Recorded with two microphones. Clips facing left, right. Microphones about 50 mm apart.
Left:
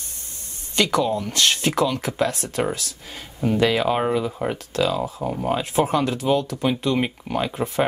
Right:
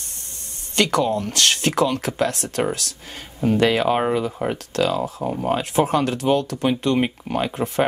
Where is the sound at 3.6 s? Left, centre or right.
Centre.